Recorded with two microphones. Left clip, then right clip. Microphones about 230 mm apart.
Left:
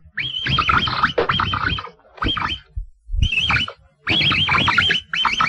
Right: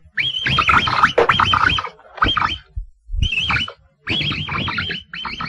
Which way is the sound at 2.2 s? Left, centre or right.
Centre.